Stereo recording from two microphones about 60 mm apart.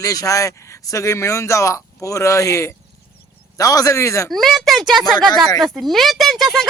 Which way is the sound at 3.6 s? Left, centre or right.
Left.